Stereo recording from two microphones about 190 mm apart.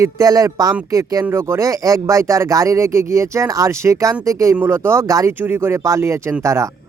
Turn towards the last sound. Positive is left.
turn(degrees=-15)  # may be behind; listen again after turning